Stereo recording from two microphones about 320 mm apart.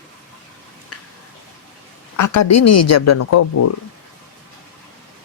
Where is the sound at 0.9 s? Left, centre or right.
Left.